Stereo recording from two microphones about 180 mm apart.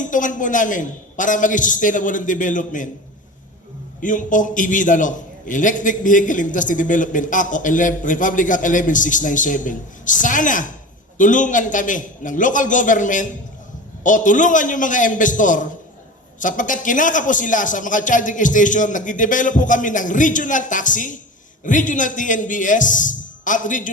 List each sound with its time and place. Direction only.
0.0 s a man's voice: 45° left (ahead or behind)
4.0 s a man's voice: 45° left (ahead or behind)